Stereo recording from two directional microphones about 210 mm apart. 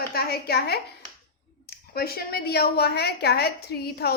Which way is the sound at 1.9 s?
45° left (ahead or behind).